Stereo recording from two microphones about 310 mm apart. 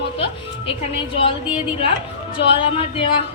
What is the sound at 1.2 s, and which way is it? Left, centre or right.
A woman's voice, centre.